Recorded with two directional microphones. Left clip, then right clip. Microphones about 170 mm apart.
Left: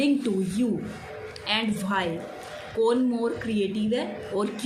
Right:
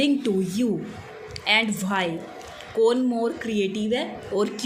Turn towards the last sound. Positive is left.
turn(degrees=-45)  # may be behind; listen again after turning